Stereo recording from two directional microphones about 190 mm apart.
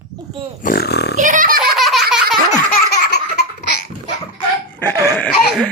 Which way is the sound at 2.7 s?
60° left (ahead or behind).